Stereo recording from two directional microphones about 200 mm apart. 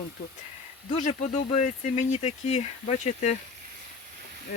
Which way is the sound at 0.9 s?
40° left (ahead or behind).